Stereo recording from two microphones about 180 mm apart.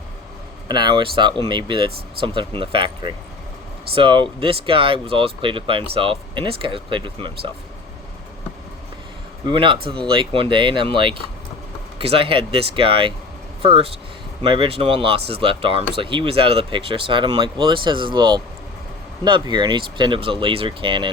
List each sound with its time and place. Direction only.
0.7 s speech: 25° right (ahead or behind)
9.5 s speech: 25° right (ahead or behind)